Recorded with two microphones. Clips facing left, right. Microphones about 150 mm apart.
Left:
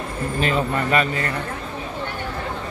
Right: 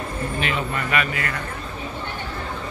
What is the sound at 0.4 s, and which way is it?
Speech, 40° left (ahead or behind).